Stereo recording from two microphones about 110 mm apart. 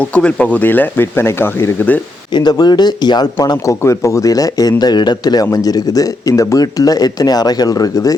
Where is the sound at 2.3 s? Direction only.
40° left (ahead or behind).